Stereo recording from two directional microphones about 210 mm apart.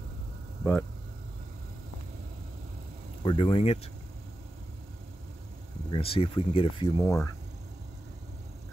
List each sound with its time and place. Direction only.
3.3 s speech: 25° left (ahead or behind)
5.9 s speech: 25° left (ahead or behind)
7.0 s speech: 15° left (ahead or behind)